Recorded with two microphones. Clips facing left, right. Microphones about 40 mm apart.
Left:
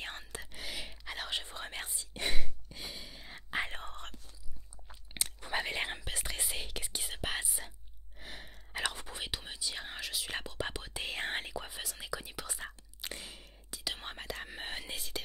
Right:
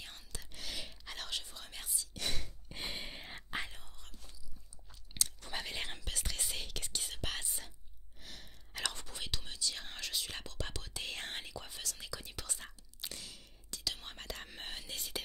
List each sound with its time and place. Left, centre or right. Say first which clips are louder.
0.0 s whispering: left 8 dB; left
0.4 s whispering: right 2 dB; centre
1.4 s whispering: left 8 dB; left
2.2 s a sound: left 4 dB; centre
2.7 s a sound: right 4 dB; right
3.6 s whispering: left 9 dB; left
4.8 s chewing: left 1 dB; left
8.2 s whispering: left 5 dB; left
13.1 s a sound: left 4 dB; left
13.7 s whispering: left 2 dB; centre
15.0 s whispering: left 1 dB; centre